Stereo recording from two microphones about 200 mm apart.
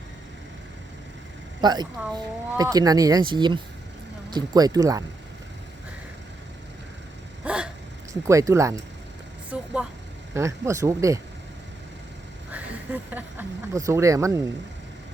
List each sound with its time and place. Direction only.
1.6 s speech: 20° right (ahead or behind)
7.4 s a sound: 5° right (ahead or behind)
8.3 s speech: 15° right (ahead or behind)
9.5 s vehicle: 5° right (ahead or behind)
10.3 s speech: 15° right (ahead or behind)
12.5 s a sound: 10° right (ahead or behind)
13.7 s speech: 15° right (ahead or behind)